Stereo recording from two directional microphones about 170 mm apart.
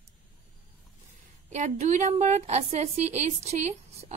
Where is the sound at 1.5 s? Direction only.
45° right (ahead or behind).